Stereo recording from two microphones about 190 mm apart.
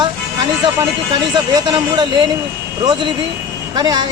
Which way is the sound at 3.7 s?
20° right (ahead or behind).